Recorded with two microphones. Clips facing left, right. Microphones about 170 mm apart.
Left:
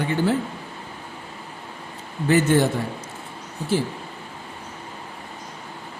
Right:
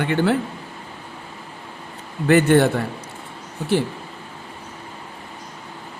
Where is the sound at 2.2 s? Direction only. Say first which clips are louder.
Right 4 dB; 60° right (ahead or behind).